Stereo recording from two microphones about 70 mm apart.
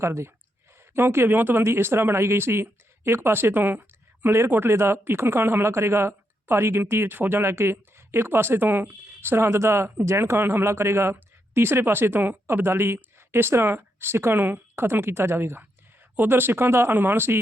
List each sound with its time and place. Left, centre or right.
0.0 s speech: right
1.6 s speech: right